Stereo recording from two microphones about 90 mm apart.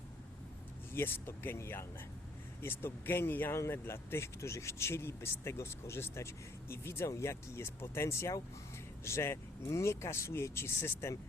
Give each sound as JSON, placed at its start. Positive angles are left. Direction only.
{"t": 0.9, "sound": "speech", "side_deg": 25}